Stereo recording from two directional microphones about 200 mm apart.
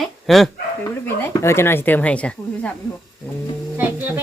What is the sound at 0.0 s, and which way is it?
Dog, centre (ahead or behind).